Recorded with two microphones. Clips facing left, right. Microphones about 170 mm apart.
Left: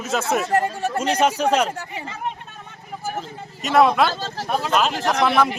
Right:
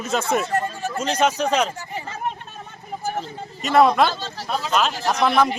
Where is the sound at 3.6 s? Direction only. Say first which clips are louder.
Even; centre (ahead or behind).